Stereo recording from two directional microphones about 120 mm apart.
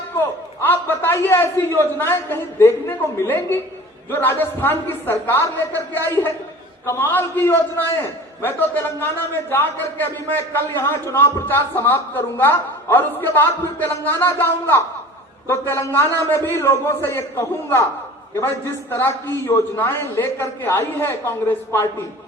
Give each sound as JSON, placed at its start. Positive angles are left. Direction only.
{"t": 0.2, "sound": "a man's voice", "side_deg": 15}